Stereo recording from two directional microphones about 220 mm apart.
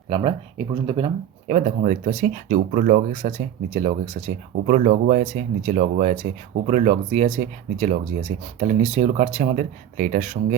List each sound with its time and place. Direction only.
0.1 s speech: 25° right (ahead or behind)